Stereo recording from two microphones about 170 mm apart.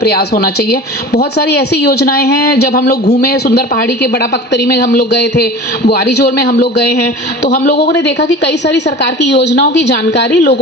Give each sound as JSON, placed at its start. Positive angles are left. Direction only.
{"t": 0.0, "sound": "speech", "side_deg": 70}
{"t": 7.4, "sound": "a man's voice", "side_deg": 45}
{"t": 7.9, "sound": "a woman's voice", "side_deg": 85}